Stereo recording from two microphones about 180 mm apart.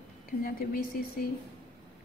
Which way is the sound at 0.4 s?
55° left (ahead or behind).